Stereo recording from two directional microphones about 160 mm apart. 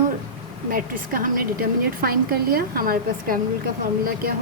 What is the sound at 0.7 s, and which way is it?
A woman's voice, 65° right (ahead or behind).